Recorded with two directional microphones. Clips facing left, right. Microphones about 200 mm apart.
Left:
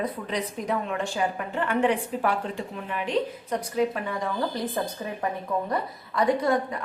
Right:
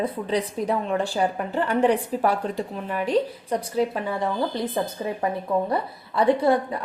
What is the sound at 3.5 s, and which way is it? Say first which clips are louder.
A woman's voice: right 2 dB; 30° right (ahead or behind).